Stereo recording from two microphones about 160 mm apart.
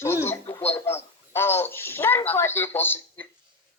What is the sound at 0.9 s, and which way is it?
Speech, 15° left (ahead or behind).